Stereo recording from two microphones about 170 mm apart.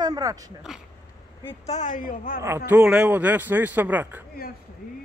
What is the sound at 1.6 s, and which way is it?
Speech, 45° left (ahead or behind).